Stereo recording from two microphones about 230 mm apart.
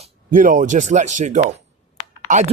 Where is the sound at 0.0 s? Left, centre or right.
Right.